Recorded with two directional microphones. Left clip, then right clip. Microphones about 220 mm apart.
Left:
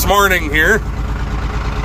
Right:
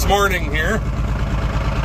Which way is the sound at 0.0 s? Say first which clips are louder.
Left 5 dB; 5° right (ahead or behind).